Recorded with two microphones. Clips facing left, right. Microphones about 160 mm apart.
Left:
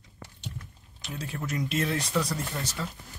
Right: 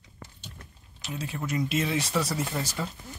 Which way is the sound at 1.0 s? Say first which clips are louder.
Right 2 dB; centre (ahead or behind).